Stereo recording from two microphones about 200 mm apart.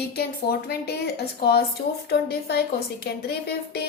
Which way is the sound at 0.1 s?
50° left (ahead or behind).